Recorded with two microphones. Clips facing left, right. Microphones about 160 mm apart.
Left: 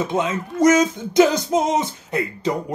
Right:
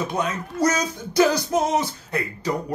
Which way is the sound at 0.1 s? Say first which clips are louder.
Left 4 dB; 20° left (ahead or behind).